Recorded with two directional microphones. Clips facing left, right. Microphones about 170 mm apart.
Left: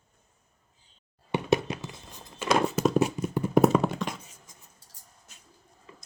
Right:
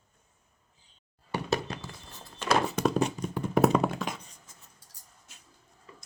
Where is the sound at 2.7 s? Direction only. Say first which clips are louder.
Left 3 dB; 5° left (ahead or behind).